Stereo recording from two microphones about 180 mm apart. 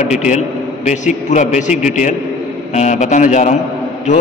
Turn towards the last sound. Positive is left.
turn(degrees=40)  # may be behind; listen again after turning